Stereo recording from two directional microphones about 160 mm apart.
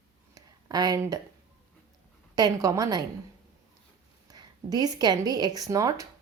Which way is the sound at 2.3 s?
25° right (ahead or behind).